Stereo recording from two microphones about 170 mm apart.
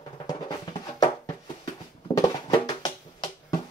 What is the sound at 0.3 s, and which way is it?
Drum, 20° left (ahead or behind).